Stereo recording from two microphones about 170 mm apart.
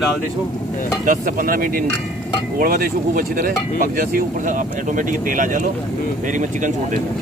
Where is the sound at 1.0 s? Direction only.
55° right (ahead or behind).